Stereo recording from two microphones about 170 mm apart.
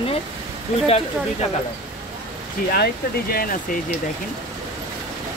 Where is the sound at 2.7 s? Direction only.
60° left (ahead or behind).